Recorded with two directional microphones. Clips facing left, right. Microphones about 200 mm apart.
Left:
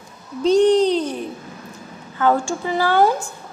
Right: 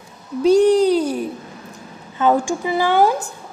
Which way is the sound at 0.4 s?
10° right (ahead or behind).